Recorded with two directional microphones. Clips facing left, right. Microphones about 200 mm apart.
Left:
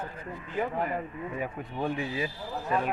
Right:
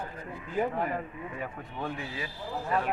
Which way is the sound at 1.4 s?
15° left (ahead or behind).